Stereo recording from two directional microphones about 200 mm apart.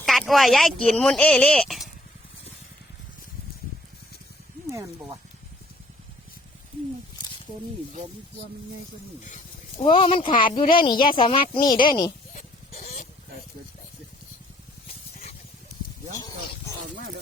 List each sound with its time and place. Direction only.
0.0 s speech: centre (ahead or behind)
4.7 s speech: 15° right (ahead or behind)
9.2 s snake: 40° left (ahead or behind)
9.8 s speech: 25° left (ahead or behind)
12.3 s a sound: 40° left (ahead or behind)
16.1 s speech: 20° left (ahead or behind)